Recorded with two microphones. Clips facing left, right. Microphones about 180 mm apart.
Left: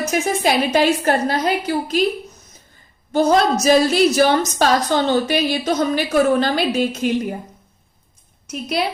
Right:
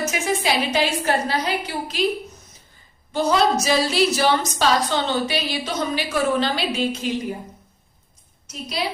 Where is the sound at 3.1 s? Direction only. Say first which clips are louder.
Left 4 dB; 45° left (ahead or behind).